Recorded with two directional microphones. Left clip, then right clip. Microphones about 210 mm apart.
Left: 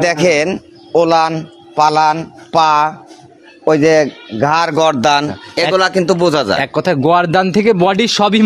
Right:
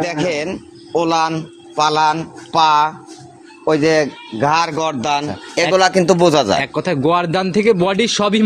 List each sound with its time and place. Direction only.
0.0 s a man's voice: 50° left (ahead or behind)
5.3 s speech: 10° left (ahead or behind)
6.6 s a man's voice: 30° left (ahead or behind)